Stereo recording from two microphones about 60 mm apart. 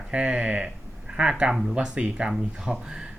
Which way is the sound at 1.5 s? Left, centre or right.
Centre.